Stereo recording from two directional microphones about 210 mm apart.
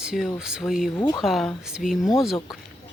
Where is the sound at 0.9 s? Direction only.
20° left (ahead or behind).